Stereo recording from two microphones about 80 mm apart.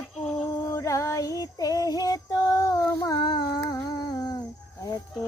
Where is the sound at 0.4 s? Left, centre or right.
Left.